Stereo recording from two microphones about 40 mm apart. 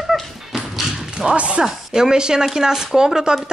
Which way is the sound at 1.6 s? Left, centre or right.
Centre.